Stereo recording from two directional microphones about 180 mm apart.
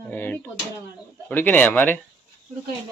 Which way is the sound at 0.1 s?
10° left (ahead or behind).